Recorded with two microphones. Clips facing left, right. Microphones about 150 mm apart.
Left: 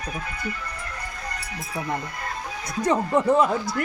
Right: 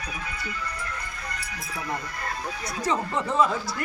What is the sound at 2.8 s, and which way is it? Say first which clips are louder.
Speech: left 6 dB; 55° left (ahead or behind).